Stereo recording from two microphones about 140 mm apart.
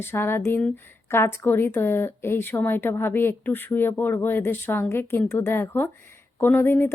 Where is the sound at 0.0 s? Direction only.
15° left (ahead or behind).